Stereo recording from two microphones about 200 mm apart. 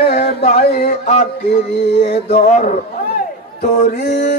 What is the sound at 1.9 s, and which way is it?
Music, 60° left (ahead or behind).